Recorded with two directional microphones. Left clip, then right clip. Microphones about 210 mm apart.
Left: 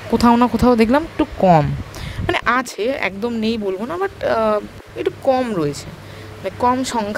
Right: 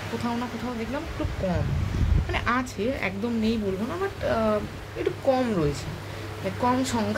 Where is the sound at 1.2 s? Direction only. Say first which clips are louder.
Left 17 dB; 45° left (ahead or behind).